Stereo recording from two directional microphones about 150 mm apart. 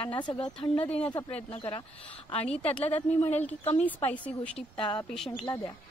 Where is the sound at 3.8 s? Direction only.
10° left (ahead or behind).